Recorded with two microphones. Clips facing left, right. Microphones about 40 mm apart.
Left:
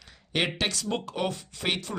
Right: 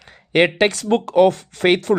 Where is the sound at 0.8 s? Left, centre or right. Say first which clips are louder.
Right 15 dB; right.